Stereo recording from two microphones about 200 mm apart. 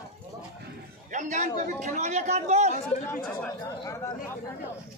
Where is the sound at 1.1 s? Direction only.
35° right (ahead or behind).